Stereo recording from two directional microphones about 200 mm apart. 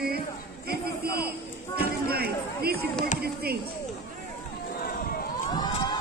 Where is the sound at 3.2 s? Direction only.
50° right (ahead or behind).